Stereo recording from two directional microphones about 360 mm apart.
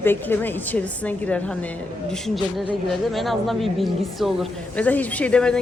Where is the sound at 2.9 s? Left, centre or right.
Centre.